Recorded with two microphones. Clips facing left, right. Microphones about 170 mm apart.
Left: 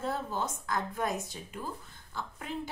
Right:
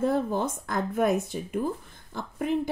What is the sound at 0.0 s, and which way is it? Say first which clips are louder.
A woman's voice: right 8 dB; 55° right (ahead or behind).